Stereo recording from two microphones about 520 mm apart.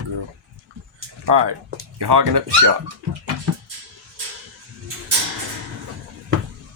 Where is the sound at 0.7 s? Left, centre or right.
Centre.